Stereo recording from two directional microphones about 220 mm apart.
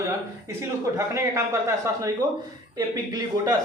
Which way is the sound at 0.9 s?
15° right (ahead or behind).